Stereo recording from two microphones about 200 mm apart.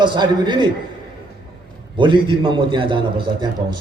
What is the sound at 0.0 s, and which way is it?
Speech, 20° right (ahead or behind).